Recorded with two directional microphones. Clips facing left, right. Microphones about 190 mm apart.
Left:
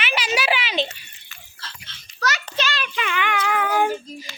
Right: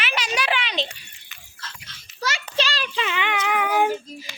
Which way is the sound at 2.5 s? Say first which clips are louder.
Right 1 dB; 35° right (ahead or behind).